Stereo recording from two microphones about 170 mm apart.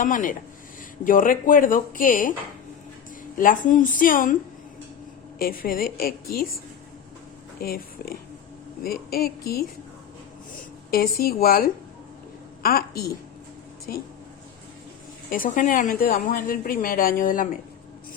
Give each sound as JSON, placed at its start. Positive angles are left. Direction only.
{"t": 0.0, "sound": "speech", "side_deg": 50}
{"t": 3.3, "sound": "speech", "side_deg": 50}
{"t": 5.4, "sound": "a woman's voice", "side_deg": 60}
{"t": 7.6, "sound": "a woman's voice", "side_deg": 60}
{"t": 10.9, "sound": "a woman's voice", "side_deg": 65}
{"t": 15.3, "sound": "a woman's voice", "side_deg": 50}